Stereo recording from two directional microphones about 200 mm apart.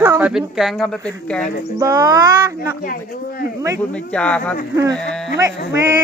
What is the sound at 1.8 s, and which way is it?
Speech, 15° right (ahead or behind).